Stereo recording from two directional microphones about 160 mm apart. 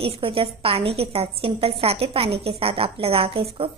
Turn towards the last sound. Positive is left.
turn(degrees=-35)  # may be behind; listen again after turning